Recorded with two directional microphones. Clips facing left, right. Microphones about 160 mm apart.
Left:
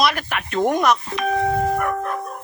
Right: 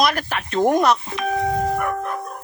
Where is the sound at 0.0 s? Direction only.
40° right (ahead or behind).